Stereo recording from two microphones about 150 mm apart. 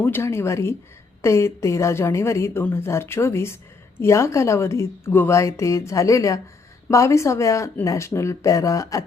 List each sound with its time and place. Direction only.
0.0 s a woman's voice: 15° left (ahead or behind)